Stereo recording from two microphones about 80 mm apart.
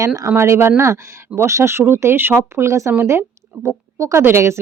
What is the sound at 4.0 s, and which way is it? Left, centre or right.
Speech, right.